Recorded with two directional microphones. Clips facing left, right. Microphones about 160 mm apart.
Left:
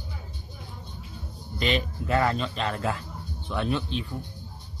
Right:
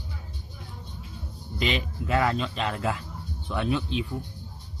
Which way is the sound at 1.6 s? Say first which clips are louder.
Left 2 dB; 5° right (ahead or behind).